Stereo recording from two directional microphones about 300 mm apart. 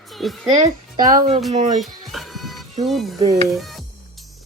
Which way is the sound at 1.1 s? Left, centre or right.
Centre.